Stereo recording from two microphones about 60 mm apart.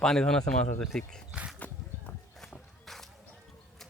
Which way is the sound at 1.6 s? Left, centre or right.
Left.